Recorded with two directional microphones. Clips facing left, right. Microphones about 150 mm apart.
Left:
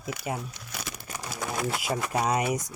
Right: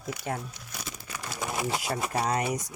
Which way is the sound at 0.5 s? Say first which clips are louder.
Left 2 dB; 80° left.